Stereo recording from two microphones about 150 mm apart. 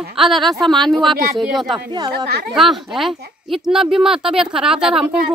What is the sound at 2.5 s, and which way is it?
Speech, centre (ahead or behind).